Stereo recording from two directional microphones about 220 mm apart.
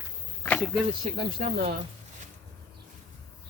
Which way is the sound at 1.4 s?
40° right (ahead or behind).